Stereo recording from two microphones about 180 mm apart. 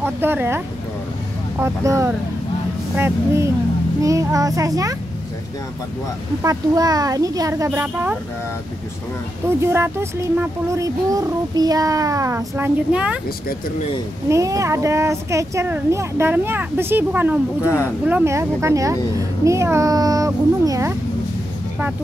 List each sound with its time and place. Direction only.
0.0 s speech: 10° right (ahead or behind)
1.6 s speech: 15° right (ahead or behind)
6.4 s speech: 20° right (ahead or behind)
9.6 s speech: 15° right (ahead or behind)
14.3 s speech: 15° right (ahead or behind)